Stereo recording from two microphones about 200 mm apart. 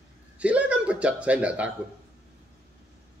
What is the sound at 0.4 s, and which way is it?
Chuckle, 5° right (ahead or behind).